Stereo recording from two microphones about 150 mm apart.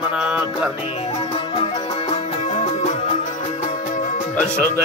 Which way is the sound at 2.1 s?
50° left (ahead or behind).